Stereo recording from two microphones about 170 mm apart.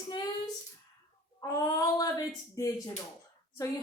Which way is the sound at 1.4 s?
20° left (ahead or behind).